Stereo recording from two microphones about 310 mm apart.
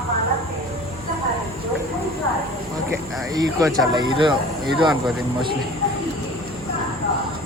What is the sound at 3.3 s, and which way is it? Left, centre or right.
Speech, centre.